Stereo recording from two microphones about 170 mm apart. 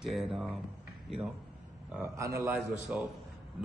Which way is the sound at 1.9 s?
15° right (ahead or behind).